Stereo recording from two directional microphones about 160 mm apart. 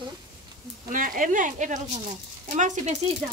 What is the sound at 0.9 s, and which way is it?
Speech, 60° right (ahead or behind).